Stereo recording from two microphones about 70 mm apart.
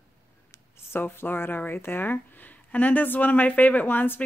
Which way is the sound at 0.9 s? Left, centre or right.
Left.